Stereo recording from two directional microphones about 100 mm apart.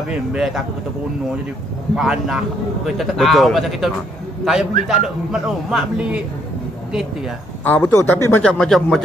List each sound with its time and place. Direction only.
0.1 s a man's voice: 5° right (ahead or behind)
2.0 s a man's voice: 5° right (ahead or behind)
7.6 s speech: 15° left (ahead or behind)
7.9 s speech: 25° left (ahead or behind)
8.5 s speech: 5° left (ahead or behind)